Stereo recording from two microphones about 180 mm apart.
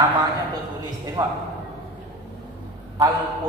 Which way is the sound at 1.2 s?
20° right (ahead or behind).